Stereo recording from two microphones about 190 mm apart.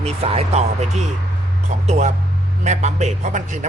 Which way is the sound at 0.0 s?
35° right (ahead or behind).